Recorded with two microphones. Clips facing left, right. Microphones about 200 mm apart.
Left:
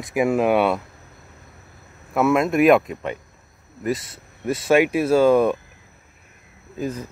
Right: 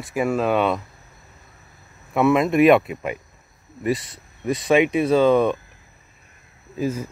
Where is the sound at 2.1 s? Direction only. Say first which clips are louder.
Right 1 dB; centre (ahead or behind).